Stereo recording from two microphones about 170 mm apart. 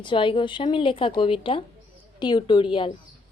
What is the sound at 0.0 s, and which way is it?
A woman's voice, 30° left (ahead or behind).